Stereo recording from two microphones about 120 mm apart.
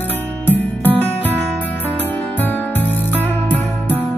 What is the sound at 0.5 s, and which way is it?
Music, 15° left (ahead or behind).